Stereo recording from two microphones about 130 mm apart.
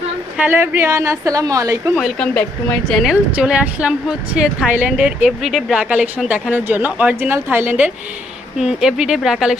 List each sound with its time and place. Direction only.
0.3 s a woman's voice: 15° right (ahead or behind)
2.0 s speech: 5° left (ahead or behind)
3.0 s speech: 5° right (ahead or behind)
8.5 s speech: 5° right (ahead or behind)